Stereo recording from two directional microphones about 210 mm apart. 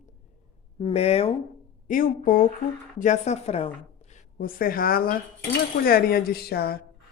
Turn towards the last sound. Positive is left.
turn(degrees=50)  # may be behind; listen again after turning